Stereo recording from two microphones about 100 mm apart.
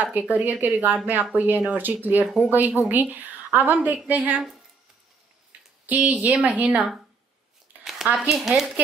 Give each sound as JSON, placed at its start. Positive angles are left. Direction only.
{"t": 0.0, "sound": "a woman's voice", "side_deg": -15}
{"t": 2.2, "sound": "speech", "side_deg": -5}
{"t": 2.5, "sound": "a woman's voice", "side_deg": -20}
{"t": 5.9, "sound": "a woman's voice", "side_deg": -15}
{"t": 7.8, "sound": "a sound", "side_deg": -5}
{"t": 8.2, "sound": "speech", "side_deg": -5}